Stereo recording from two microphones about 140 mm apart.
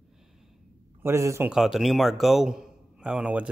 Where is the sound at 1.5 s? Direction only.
Centre (ahead or behind).